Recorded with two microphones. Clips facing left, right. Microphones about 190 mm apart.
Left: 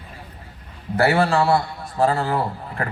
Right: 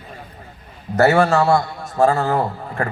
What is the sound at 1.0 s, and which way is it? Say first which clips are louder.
A man's voice: right 4 dB; 45° right (ahead or behind).